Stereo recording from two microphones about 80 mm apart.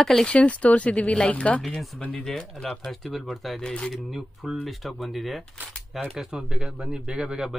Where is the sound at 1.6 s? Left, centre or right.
Centre.